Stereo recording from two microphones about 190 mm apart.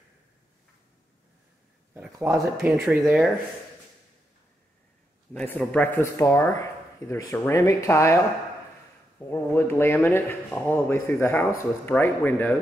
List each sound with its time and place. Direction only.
2.1 s speech: 15° right (ahead or behind)
2.6 s speech: 5° right (ahead or behind)
5.3 s speech: 10° left (ahead or behind)
9.3 s speech: 10° left (ahead or behind)